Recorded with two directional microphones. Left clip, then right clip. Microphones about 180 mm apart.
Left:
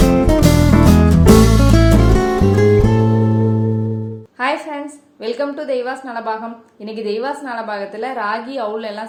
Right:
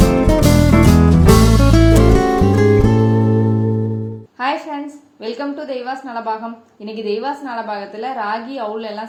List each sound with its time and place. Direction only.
0.0 s music: centre (ahead or behind)
4.4 s a sound: 30° left (ahead or behind)
5.2 s a woman's voice: 30° left (ahead or behind)